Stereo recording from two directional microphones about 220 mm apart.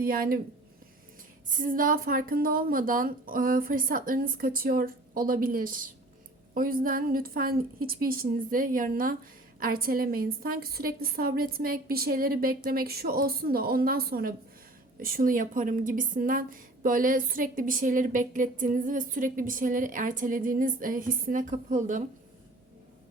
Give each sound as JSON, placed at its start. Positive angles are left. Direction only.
{"t": 0.0, "sound": "a woman's voice", "side_deg": -40}
{"t": 1.5, "sound": "a woman's voice", "side_deg": -35}